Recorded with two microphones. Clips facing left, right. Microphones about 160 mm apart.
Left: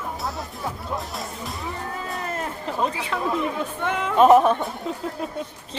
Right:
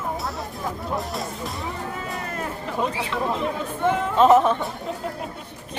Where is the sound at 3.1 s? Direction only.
45° left (ahead or behind).